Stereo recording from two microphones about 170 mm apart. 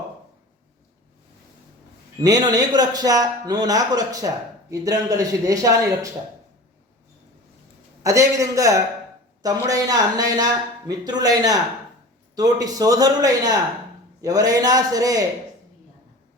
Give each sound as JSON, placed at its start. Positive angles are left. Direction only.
{"t": 2.2, "sound": "speech", "side_deg": -20}
{"t": 8.0, "sound": "speech", "side_deg": -20}